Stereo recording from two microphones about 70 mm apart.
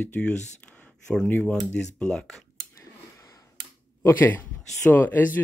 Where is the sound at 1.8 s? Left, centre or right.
Centre.